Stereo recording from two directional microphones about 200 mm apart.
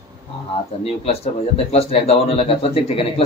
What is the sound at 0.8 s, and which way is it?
Speech, 30° left (ahead or behind).